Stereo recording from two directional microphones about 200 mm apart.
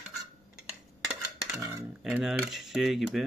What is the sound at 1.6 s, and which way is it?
Cutlery, 15° right (ahead or behind).